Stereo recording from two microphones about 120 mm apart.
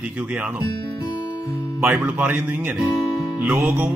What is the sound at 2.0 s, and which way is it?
Speech, 15° right (ahead or behind).